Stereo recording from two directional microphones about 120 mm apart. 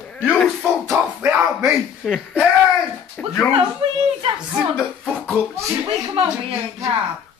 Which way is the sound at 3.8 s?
50° right (ahead or behind).